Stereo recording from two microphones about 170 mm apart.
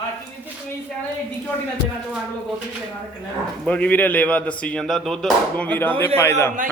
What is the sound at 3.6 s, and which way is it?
Speech, 10° left (ahead or behind).